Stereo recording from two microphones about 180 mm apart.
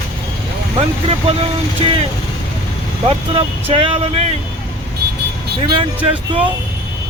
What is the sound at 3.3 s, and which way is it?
Speech, 30° right (ahead or behind).